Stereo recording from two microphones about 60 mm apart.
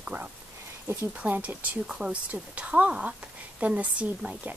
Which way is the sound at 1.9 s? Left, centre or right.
Centre.